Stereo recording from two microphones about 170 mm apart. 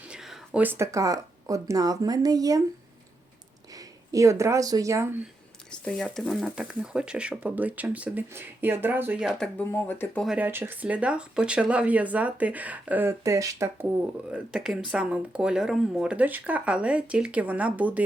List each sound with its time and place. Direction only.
0.1 s speech: 5° right (ahead or behind); by 2.6 s 20° right (ahead or behind)
3.7 s speech: 20° right (ahead or behind)
5.7 s speech: 5° left (ahead or behind)
9.6 s speech: 10° left (ahead or behind)
10.2 s speech: 10° right (ahead or behind)
14.3 s speech: 5° right (ahead or behind)